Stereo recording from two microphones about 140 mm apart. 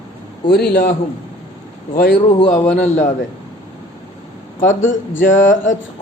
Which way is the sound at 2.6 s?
55° left (ahead or behind).